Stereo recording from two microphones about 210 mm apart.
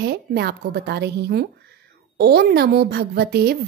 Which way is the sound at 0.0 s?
50° right (ahead or behind).